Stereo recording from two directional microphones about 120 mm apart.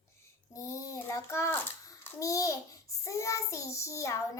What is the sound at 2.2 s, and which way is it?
Child singing, 25° left (ahead or behind).